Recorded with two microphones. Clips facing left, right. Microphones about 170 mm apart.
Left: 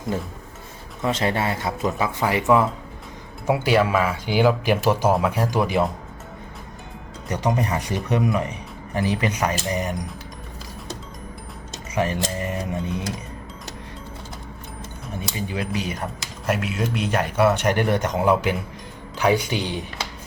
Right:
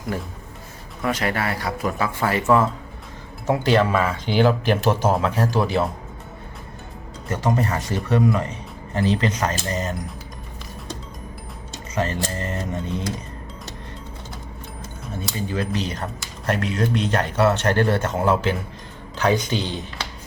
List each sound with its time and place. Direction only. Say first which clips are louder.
1.0 s speech: left 1 dB; 25° left (ahead or behind)
7.3 s speech: right 1 dB; 15° left (ahead or behind)
11.9 s speech: left 1 dB; 15° left (ahead or behind)
15.1 s speech: right 2 dB; 15° left (ahead or behind)